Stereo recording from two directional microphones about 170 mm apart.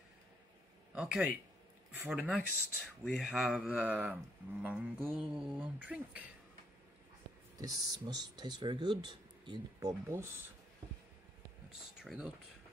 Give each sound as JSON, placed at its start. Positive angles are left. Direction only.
{"t": 0.9, "sound": "speech", "side_deg": 0}
{"t": 7.5, "sound": "speech", "side_deg": -20}
{"t": 12.0, "sound": "speech", "side_deg": -5}